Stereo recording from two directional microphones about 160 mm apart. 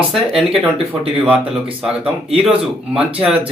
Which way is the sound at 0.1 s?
Centre (ahead or behind).